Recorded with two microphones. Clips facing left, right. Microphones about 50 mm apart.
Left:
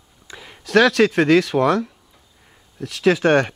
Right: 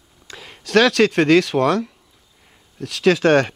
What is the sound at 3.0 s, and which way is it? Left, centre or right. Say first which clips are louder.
Speech: right 1 dB; centre.